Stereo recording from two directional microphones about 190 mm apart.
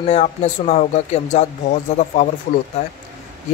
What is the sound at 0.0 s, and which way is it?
Speech, 35° left (ahead or behind).